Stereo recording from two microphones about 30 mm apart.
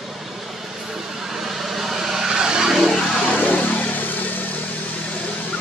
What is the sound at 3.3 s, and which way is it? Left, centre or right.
Vehicle, left.